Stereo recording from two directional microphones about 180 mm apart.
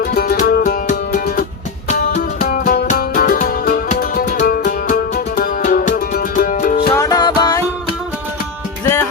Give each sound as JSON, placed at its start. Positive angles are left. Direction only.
{"t": 0.0, "sound": "music", "side_deg": 55}
{"t": 6.9, "sound": "music", "side_deg": 20}
{"t": 8.8, "sound": "music", "side_deg": 15}